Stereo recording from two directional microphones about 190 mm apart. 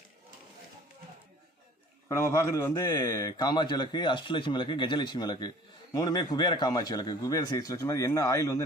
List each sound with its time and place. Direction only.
2.0 s a man's voice: 15° left (ahead or behind)